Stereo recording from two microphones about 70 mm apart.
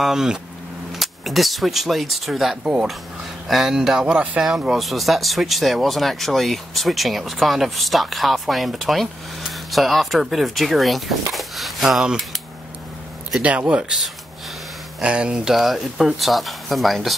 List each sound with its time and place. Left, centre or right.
0.0 s speech: centre
2.6 s speech: centre
3.4 s speech: centre
4.7 s speech: centre
13.4 s speech: centre
15.0 s speech: centre
15.5 s speech: centre